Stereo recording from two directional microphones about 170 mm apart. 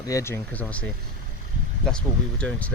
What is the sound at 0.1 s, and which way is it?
Speech, 15° left (ahead or behind).